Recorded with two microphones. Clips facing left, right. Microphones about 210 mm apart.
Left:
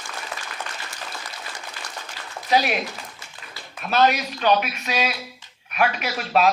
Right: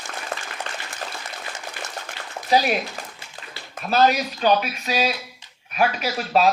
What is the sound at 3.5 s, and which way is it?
Speech, 35° right (ahead or behind).